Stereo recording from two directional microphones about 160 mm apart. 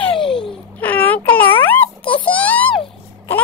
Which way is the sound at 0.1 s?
35° left (ahead or behind).